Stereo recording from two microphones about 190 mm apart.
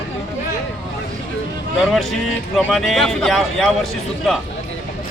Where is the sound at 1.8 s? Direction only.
Centre (ahead or behind).